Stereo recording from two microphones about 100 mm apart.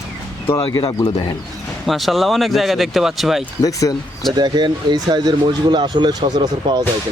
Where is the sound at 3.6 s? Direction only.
35° left (ahead or behind).